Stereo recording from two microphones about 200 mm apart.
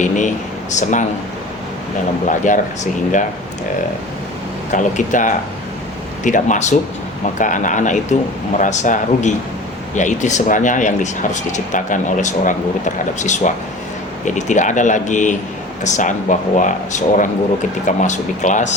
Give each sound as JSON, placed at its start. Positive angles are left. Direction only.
{"t": 0.0, "sound": "speech", "side_deg": 40}
{"t": 2.4, "sound": "speech", "side_deg": 40}
{"t": 4.7, "sound": "speech", "side_deg": 40}